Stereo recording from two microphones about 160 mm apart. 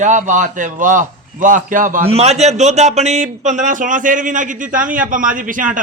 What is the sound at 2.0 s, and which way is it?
A man's voice, 40° right (ahead or behind).